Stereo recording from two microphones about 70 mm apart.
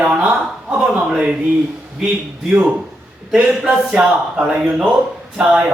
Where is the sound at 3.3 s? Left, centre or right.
Centre.